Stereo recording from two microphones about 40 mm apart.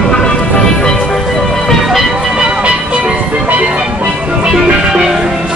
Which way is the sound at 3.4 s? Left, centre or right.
Right.